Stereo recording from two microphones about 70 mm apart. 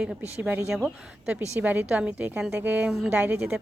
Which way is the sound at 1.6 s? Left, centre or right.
Right.